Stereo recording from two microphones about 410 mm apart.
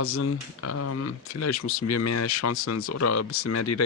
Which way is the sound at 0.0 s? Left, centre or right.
Left.